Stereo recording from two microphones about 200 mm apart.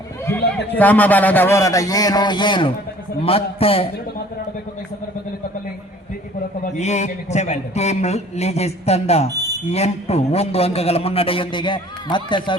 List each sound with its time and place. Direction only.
0.8 s a man's voice: 10° left (ahead or behind); by 3.8 s 30° left (ahead or behind)
6.7 s a man's voice: 35° left (ahead or behind)